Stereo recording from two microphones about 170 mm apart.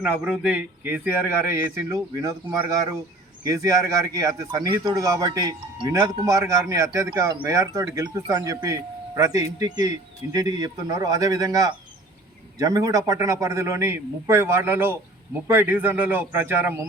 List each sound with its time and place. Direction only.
0.0 s a man's voice: 10° right (ahead or behind)